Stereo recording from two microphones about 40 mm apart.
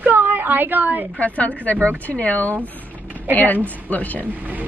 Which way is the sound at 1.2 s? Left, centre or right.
Left.